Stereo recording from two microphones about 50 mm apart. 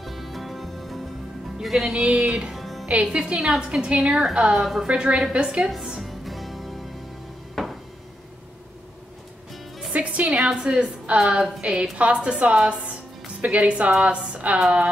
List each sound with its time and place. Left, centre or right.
0.0 s music: centre
2.5 s music: centre
2.9 s a woman's voice: centre
3.3 s music: centre
3.9 s a woman's voice: right
4.2 s music: centre
4.8 s a woman's voice: centre
6.0 s music: centre
7.6 s a sound: centre
9.9 s a woman's voice: right
10.3 s a woman's voice: centre